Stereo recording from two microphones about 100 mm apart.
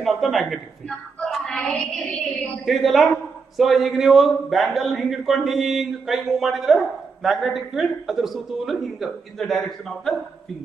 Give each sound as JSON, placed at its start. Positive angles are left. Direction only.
{"t": 0.0, "sound": "a woman's voice", "side_deg": 0}